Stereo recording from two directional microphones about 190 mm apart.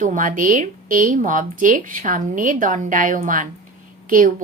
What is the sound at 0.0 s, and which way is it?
Speech, 45° right (ahead or behind).